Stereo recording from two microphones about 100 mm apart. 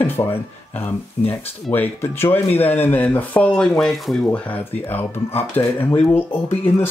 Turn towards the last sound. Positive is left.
turn(degrees=20)  # may be behind; listen again after turning